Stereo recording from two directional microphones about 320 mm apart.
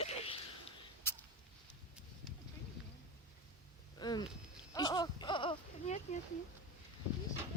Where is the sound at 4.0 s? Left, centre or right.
Centre.